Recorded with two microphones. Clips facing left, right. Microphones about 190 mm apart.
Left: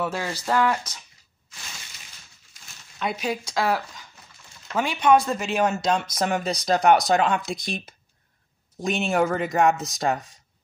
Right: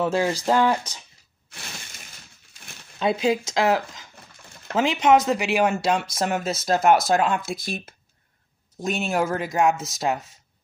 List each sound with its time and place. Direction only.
0.0 s speech: 15° right (ahead or behind)
1.5 s a sound: 60° right (ahead or behind)
3.0 s speech: 25° right (ahead or behind); by 10.4 s 5° right (ahead or behind)